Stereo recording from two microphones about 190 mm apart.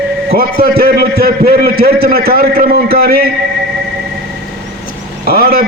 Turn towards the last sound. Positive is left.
turn(degrees=-55)  # may be behind; listen again after turning